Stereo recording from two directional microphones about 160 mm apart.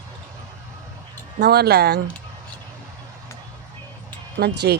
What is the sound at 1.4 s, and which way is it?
Speech, 90° right.